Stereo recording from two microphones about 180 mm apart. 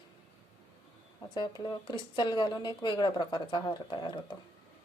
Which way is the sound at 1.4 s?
25° left (ahead or behind).